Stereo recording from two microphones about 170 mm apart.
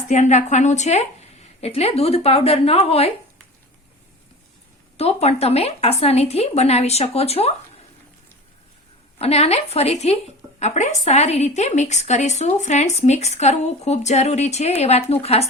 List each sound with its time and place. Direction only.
0.1 s a woman's voice: 45° left (ahead or behind)
4.9 s a woman's voice: 40° left (ahead or behind)
9.1 s a woman's voice: 35° left (ahead or behind)